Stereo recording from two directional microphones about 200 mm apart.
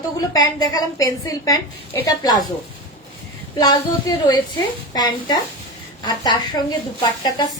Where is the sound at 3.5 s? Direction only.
20° left (ahead or behind).